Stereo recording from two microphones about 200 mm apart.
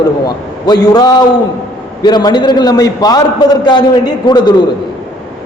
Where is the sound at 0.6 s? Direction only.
20° left (ahead or behind).